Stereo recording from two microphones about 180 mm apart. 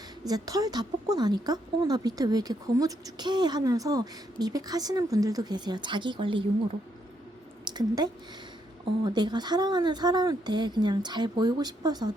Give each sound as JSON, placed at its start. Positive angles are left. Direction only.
{"t": 0.3, "sound": "speech", "side_deg": -20}
{"t": 7.7, "sound": "speech", "side_deg": -25}